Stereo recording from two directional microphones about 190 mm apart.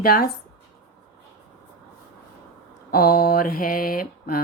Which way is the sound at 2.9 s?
50° left (ahead or behind).